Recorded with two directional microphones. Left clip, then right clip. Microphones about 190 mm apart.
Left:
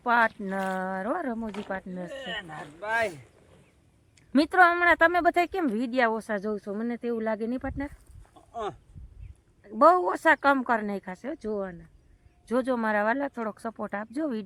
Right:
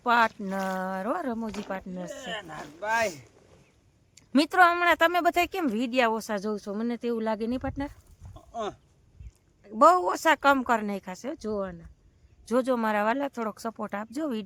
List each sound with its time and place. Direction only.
0.0 s speech: 10° right (ahead or behind)
2.1 s speech: 40° right (ahead or behind); by 3.2 s 55° right (ahead or behind)
4.3 s speech: 5° right (ahead or behind)
8.4 s a sound: 50° right (ahead or behind)
9.6 s speech: 5° right (ahead or behind)